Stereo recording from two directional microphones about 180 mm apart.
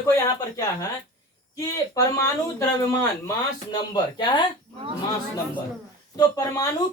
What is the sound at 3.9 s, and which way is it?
Speech, 25° left (ahead or behind).